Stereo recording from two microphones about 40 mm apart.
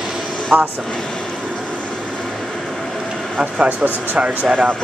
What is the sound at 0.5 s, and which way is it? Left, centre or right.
Speech, right.